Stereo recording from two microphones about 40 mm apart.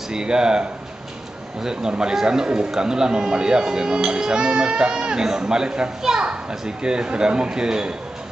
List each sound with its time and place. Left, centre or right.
0.1 s speech: centre